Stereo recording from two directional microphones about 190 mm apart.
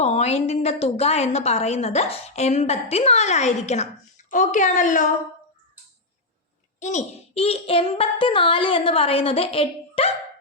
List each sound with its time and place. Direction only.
0.0 s a woman's voice: 35° left (ahead or behind)
6.7 s child singing: 40° left (ahead or behind)